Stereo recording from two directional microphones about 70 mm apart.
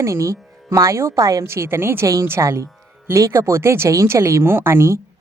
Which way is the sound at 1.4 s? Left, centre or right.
Right.